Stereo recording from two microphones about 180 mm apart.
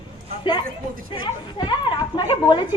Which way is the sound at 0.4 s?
25° left (ahead or behind).